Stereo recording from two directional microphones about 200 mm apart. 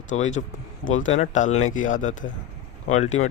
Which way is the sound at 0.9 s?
40° left (ahead or behind).